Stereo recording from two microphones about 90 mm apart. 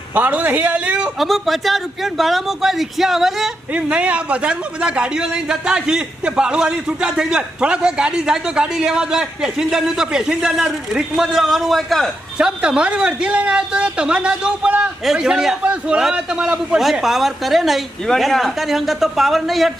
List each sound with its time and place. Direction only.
0.1 s a man's voice: 20° right (ahead or behind)
1.2 s a man's voice: centre (ahead or behind)
3.7 s a man's voice: 15° right (ahead or behind); by 12.1 s centre (ahead or behind)
12.4 s a man's voice: 10° right (ahead or behind)